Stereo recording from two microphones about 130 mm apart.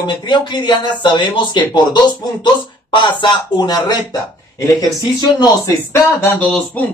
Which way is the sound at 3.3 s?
30° left (ahead or behind).